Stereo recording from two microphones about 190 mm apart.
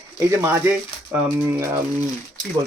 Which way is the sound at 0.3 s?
10° right (ahead or behind).